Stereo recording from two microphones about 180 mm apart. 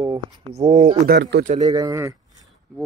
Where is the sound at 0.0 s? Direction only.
30° right (ahead or behind).